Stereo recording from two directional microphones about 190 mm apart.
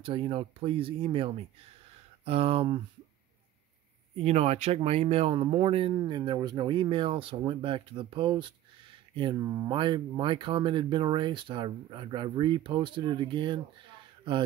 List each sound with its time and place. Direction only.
0.0 s speech: 25° right (ahead or behind)
4.2 s speech: 35° right (ahead or behind)